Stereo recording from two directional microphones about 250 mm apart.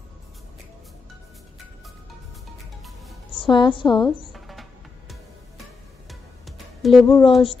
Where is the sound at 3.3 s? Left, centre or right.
Left.